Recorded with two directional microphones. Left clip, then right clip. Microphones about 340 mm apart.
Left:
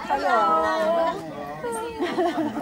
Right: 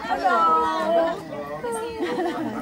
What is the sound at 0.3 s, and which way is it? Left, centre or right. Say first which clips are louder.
Cat: right 1 dB; centre.